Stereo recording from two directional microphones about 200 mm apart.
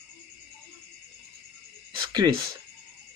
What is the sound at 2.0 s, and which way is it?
Speech, 20° right (ahead or behind).